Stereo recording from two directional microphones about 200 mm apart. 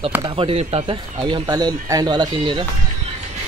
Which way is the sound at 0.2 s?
25° right (ahead or behind).